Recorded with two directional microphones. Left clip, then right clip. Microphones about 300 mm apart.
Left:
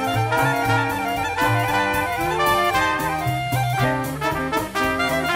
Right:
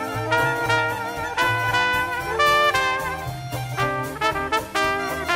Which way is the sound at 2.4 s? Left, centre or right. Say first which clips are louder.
Right 2 dB; right.